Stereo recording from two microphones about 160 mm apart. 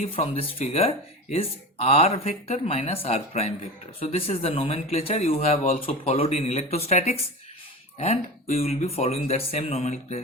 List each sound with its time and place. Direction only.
0.0 s speech: 35° left (ahead or behind)